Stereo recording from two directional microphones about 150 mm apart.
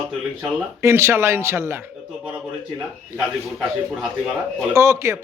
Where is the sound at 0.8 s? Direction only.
20° right (ahead or behind).